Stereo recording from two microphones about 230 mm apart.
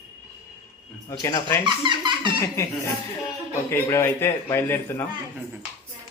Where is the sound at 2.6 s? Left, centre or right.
Centre.